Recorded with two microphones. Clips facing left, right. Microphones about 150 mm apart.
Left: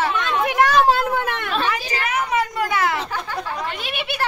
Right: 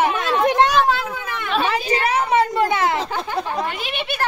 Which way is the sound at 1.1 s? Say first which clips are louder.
Left 5 dB; 60° left (ahead or behind).